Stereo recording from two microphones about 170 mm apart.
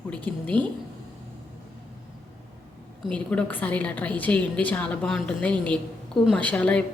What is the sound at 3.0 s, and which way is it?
A woman's voice, 5° left (ahead or behind).